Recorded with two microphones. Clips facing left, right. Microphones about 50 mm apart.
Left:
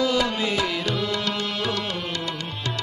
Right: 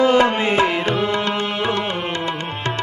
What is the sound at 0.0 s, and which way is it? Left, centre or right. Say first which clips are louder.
Tabla: right 8 dB; right.